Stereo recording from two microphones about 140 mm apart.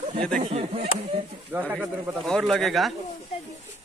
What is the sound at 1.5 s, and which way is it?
Speech, 15° right (ahead or behind).